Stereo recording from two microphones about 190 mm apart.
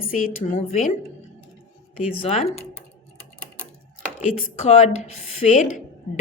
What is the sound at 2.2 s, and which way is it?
Speech, 35° left (ahead or behind).